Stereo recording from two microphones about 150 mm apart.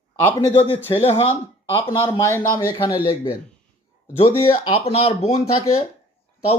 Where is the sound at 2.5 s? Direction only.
25° left (ahead or behind).